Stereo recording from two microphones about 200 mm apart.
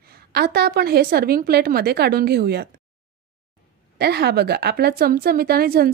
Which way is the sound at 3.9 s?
55° right (ahead or behind).